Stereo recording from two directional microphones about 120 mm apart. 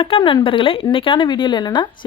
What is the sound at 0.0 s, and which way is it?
Speech, 45° left (ahead or behind).